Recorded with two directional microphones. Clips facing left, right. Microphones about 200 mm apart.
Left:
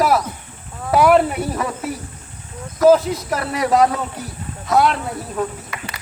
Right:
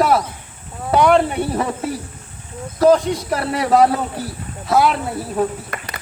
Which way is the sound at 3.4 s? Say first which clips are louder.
Right 1 dB; 30° right (ahead or behind).